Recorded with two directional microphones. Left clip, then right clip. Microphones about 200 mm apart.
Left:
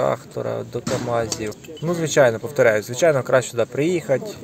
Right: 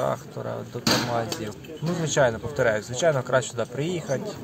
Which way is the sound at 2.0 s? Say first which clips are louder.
Left 6 dB; 20° left (ahead or behind).